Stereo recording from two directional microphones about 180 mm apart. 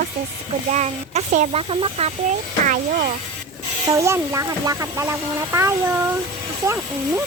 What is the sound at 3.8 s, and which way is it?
Speech, 15° right (ahead or behind).